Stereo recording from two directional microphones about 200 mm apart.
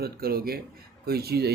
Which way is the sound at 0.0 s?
50° right (ahead or behind).